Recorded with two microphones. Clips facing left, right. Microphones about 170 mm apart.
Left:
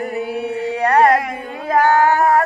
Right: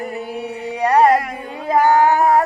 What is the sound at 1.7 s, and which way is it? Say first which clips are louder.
Child singing: even; 15° right (ahead or behind).